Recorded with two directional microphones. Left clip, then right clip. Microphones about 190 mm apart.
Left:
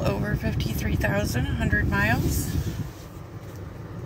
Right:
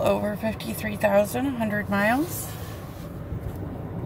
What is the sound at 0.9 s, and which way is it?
Speech, 20° right (ahead or behind).